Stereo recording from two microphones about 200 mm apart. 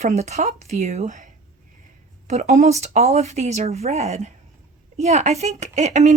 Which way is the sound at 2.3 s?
35° right (ahead or behind).